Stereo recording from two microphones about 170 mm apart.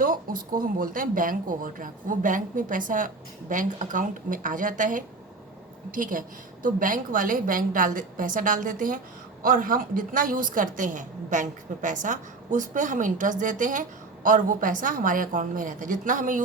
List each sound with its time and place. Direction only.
0.0 s a woman's voice: 55° right (ahead or behind)